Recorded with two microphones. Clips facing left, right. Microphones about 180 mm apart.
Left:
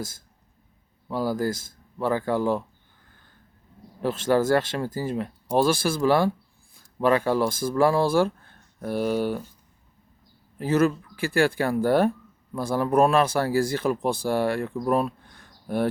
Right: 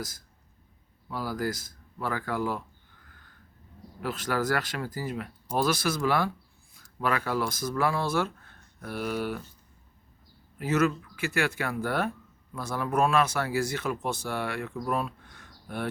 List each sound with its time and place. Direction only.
1.0 s speech: 25° left (ahead or behind)
4.0 s speech: 25° left (ahead or behind)
10.6 s speech: 30° left (ahead or behind)
14.9 s a sound: 35° left (ahead or behind)